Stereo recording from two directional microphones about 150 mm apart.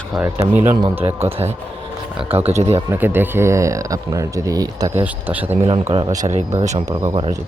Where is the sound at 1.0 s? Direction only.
45° right (ahead or behind).